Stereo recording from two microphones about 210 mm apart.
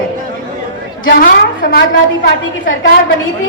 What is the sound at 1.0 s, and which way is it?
Speech, 45° left (ahead or behind).